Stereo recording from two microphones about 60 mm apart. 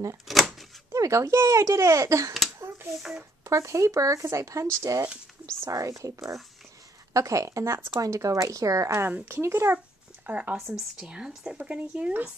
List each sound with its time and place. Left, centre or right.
0.3 s speech: centre
0.9 s speech: right
3.4 s speech: right
4.8 s speech: right
9.3 s a child's voice: right
10.2 s speech: right
10.5 s speech: centre